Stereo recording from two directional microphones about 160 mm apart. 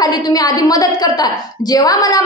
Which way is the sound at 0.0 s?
25° left (ahead or behind).